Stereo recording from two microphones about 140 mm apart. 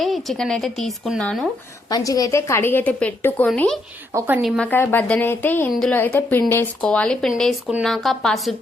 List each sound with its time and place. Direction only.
0.0 s a woman's voice: centre (ahead or behind)
1.9 s a woman's voice: 25° left (ahead or behind); by 4.7 s centre (ahead or behind)
4.7 s a woman's voice: 15° left (ahead or behind)